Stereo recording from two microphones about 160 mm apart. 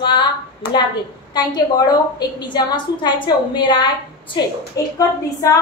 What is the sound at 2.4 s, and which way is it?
A woman's voice, 30° left (ahead or behind).